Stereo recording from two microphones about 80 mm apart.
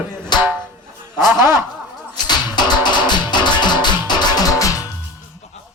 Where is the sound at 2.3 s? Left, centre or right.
Left.